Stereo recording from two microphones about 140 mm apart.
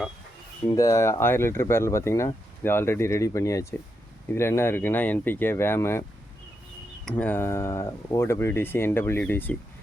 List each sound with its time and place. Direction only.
0.6 s speech: 25° left (ahead or behind)
7.0 s speech: 10° left (ahead or behind)